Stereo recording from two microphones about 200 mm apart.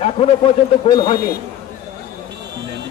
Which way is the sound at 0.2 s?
30° left (ahead or behind).